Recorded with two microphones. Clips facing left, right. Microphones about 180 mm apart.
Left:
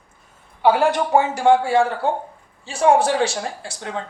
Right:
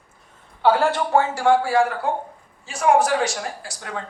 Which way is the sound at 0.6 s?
15° left (ahead or behind).